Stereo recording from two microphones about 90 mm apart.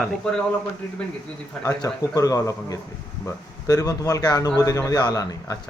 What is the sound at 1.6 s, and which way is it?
A man's voice, 40° left (ahead or behind).